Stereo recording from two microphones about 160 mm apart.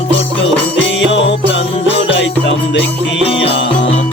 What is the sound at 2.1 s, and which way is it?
Music, 90° left.